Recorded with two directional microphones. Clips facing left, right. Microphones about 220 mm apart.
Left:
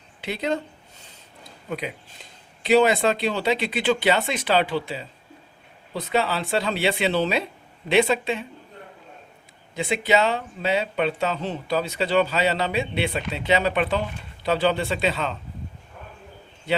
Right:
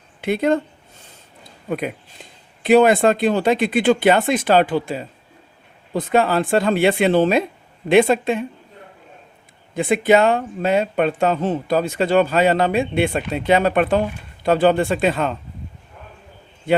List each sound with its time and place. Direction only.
0.2 s speech: 50° right (ahead or behind)
1.7 s speech: 50° right (ahead or behind)
9.7 s speech: 50° right (ahead or behind)
16.7 s a man's voice: 50° right (ahead or behind)